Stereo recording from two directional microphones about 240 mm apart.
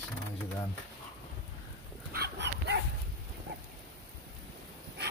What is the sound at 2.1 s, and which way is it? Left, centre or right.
Dog, right.